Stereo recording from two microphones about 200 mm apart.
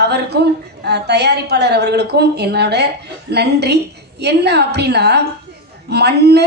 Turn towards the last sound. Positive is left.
turn(degrees=-55)  # may be behind; listen again after turning